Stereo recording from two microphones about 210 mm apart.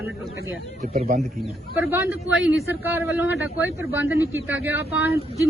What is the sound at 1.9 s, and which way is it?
A man's voice, 10° right (ahead or behind).